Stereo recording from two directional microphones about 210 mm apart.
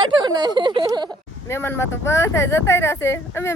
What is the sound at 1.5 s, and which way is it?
A woman's voice, 10° left (ahead or behind).